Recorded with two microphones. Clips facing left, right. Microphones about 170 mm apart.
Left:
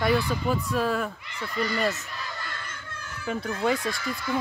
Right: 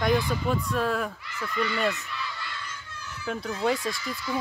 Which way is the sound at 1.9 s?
45° left (ahead or behind).